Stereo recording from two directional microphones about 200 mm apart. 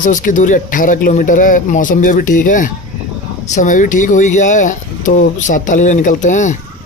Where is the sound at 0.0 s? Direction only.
40° left (ahead or behind).